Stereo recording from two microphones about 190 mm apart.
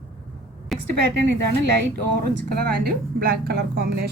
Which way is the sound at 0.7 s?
Centre (ahead or behind).